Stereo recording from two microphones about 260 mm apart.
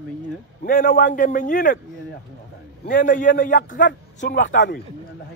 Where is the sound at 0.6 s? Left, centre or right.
Left.